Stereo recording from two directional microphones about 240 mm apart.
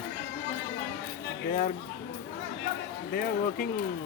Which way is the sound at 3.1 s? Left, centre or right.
Left.